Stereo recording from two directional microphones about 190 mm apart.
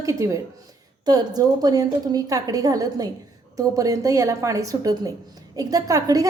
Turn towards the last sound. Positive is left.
turn(degrees=-20)  # may be behind; listen again after turning